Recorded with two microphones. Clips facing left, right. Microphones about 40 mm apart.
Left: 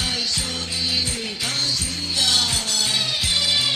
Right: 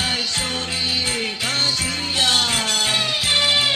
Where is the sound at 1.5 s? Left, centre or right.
Right.